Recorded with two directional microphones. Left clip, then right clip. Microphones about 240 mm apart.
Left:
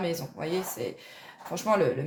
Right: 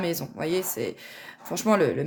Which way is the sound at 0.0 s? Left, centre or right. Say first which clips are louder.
Right 3 dB; right.